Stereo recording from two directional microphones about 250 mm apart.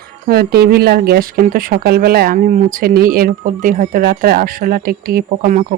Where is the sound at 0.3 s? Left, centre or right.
Right.